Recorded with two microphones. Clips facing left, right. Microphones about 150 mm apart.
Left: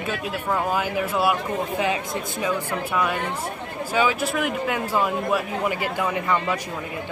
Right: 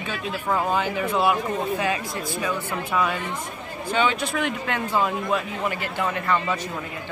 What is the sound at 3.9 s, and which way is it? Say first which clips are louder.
A man's voice: left 1 dB; 5° left (ahead or behind).